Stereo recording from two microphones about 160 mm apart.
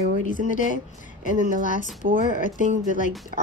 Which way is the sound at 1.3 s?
55° right (ahead or behind).